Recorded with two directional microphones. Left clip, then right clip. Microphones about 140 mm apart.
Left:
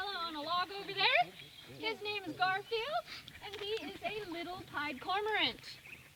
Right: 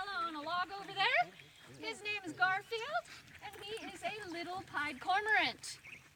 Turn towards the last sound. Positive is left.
turn(degrees=10)  # may be behind; listen again after turning